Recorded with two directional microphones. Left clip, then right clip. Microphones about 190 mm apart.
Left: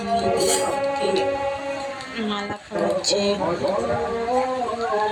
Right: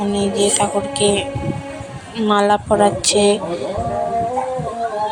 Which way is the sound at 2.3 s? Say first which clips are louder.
Right 17 dB; 45° right (ahead or behind).